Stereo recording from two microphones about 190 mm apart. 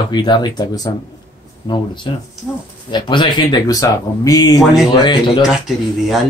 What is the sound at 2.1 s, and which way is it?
Speech, 25° left (ahead or behind).